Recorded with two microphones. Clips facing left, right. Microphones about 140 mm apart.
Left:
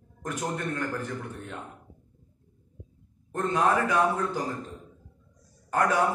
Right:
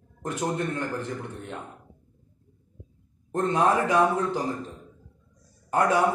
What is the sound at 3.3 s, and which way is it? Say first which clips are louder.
Speech: right 2 dB; 30° right (ahead or behind).